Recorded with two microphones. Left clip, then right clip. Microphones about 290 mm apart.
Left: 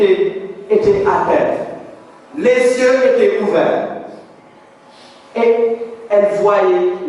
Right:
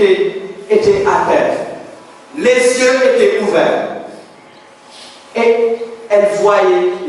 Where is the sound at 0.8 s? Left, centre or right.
Centre.